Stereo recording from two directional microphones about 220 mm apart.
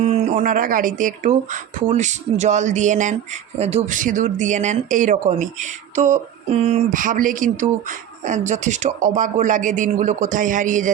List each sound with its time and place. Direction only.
0.0 s speech: 30° right (ahead or behind)